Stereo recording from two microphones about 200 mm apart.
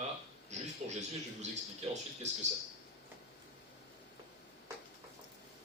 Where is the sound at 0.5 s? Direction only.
35° right (ahead or behind).